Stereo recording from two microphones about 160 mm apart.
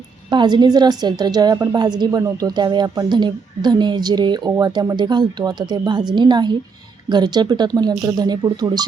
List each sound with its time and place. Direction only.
0.3 s a woman's voice: 25° right (ahead or behind)